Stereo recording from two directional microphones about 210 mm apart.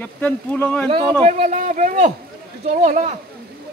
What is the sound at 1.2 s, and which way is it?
Speech, 30° right (ahead or behind).